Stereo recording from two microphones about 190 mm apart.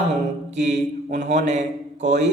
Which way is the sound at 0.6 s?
35° right (ahead or behind).